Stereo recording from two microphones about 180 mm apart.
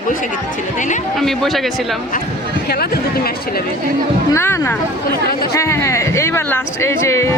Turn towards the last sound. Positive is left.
turn(degrees=15)  # may be behind; listen again after turning